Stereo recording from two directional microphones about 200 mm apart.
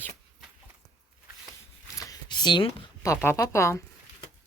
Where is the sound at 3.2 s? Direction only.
15° left (ahead or behind).